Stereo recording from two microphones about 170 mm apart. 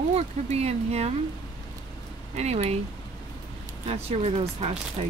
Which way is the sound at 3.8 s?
40° right (ahead or behind).